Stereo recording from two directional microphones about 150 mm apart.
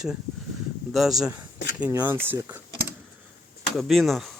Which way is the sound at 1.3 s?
20° right (ahead or behind).